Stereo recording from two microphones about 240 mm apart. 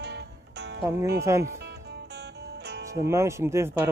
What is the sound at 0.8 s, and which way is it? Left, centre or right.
Speech, centre.